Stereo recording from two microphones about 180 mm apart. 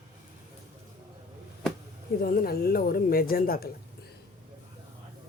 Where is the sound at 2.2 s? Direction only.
55° left (ahead or behind).